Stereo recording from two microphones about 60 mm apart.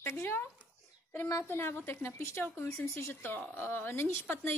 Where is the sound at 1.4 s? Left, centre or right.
Left.